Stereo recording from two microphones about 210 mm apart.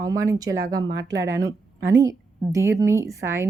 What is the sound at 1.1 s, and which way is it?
Speech, 60° right (ahead or behind).